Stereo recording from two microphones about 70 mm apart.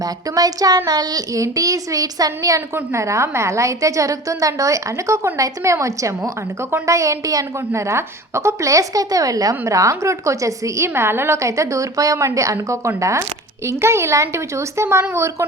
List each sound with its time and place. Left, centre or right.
0.0 s speech: right
2.7 s a woman's voice: right
7.7 s a woman's voice: right